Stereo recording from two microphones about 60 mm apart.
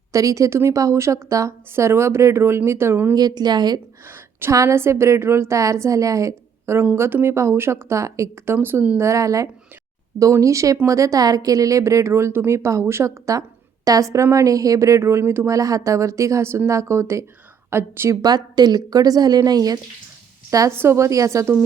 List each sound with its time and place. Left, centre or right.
0.1 s speech: right
1.7 s a woman's voice: right
4.7 s a woman's voice: right
6.9 s a woman's voice: right
8.4 s speech: right
9.0 s speech: right
15.4 s a woman's voice: right
18.1 s a woman's voice: right
20.7 s speech: right